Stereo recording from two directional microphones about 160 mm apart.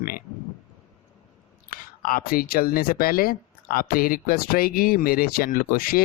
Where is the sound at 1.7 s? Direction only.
65° left (ahead or behind).